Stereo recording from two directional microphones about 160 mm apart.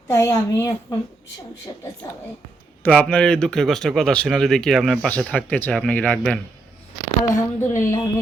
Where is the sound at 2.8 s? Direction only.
5° left (ahead or behind).